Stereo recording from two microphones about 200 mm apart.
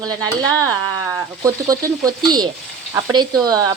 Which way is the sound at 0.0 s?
20° right (ahead or behind).